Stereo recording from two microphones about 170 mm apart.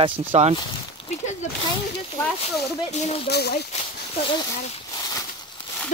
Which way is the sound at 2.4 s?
40° left (ahead or behind).